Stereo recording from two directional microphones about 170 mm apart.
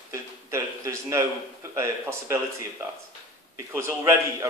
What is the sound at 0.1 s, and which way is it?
A man's voice, 15° right (ahead or behind).